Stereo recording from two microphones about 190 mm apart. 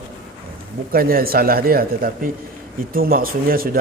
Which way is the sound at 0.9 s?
50° right (ahead or behind).